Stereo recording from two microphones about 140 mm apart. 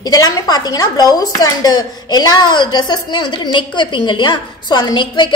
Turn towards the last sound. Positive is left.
turn(degrees=35)  # may be behind; listen again after turning